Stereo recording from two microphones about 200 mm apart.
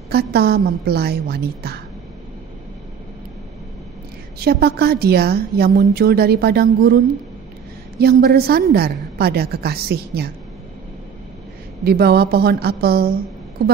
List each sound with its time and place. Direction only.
0.1 s a woman's voice: 50° right (ahead or behind)
4.4 s a woman's voice: 50° right (ahead or behind)
8.0 s a woman's voice: 50° right (ahead or behind)
11.8 s a woman's voice: 50° right (ahead or behind)